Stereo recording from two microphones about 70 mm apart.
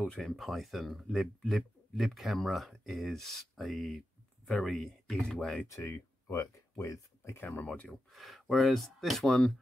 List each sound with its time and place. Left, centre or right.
0.0 s speech: centre
0.4 s speech: centre
5.7 s speech: left
7.4 s speech: centre
8.1 s speech: centre